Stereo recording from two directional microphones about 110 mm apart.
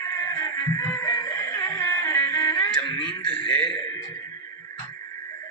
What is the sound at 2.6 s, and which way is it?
Speech, 15° left (ahead or behind).